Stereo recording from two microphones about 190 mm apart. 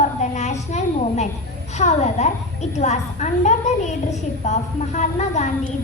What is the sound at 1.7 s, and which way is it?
A woman's voice, 35° left (ahead or behind).